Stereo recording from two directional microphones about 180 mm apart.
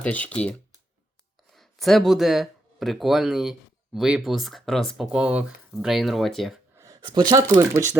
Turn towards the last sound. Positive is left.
turn(degrees=-15)  # may be behind; listen again after turning